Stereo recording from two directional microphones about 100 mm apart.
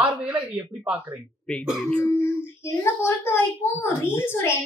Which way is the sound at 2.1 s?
20° left (ahead or behind).